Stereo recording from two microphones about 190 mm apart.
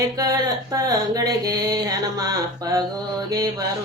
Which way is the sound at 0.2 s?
20° right (ahead or behind).